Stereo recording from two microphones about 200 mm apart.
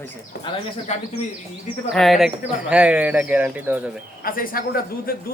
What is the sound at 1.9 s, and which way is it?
Speech, centre (ahead or behind).